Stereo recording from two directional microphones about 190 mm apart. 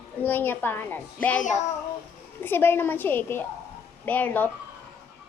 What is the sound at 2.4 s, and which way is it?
A child's voice, 10° left (ahead or behind).